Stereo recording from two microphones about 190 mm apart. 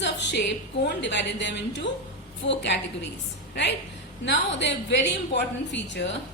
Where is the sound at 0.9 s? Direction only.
65° left (ahead or behind).